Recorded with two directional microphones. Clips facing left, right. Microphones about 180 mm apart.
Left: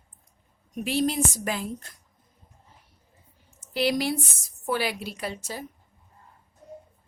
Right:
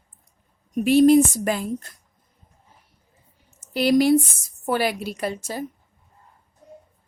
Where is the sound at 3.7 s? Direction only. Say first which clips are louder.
Right 8 dB; 45° right (ahead or behind).